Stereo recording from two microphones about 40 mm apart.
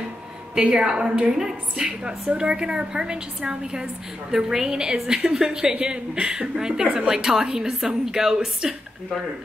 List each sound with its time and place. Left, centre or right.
0.7 s a woman's voice: centre